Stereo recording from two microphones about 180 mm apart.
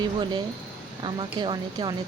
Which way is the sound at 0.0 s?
25° right (ahead or behind).